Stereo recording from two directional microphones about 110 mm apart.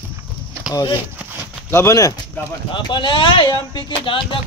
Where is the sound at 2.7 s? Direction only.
45° left (ahead or behind).